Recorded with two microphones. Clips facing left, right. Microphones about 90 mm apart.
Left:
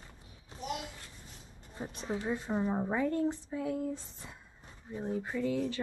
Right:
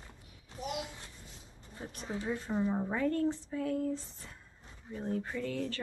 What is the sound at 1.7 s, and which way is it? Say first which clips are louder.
A woman's voice: left 3 dB; 20° left (ahead or behind).